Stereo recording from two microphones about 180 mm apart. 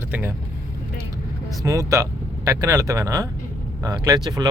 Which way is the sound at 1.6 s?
15° right (ahead or behind).